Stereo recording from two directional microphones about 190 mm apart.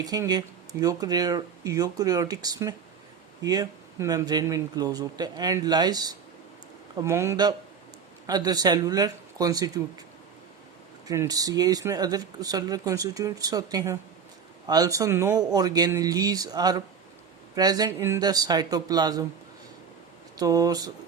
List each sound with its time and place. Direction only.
0.0 s speech: 20° right (ahead or behind)
11.1 s speech: 20° right (ahead or behind)
20.3 s speech: 20° right (ahead or behind)